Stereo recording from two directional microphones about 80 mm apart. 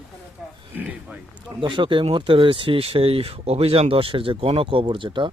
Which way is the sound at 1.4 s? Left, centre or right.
Right.